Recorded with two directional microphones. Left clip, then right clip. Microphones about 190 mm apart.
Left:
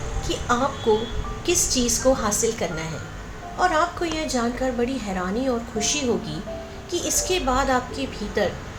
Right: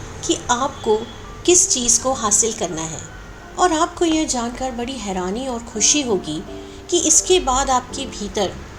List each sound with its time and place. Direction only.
0.3 s a woman's voice: 35° right (ahead or behind)
1.5 s a woman's voice: 30° right (ahead or behind)